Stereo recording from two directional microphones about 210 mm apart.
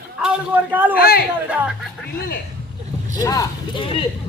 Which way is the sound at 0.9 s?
45° left (ahead or behind).